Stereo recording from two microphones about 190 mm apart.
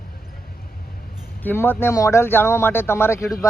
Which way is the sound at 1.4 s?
10° left (ahead or behind).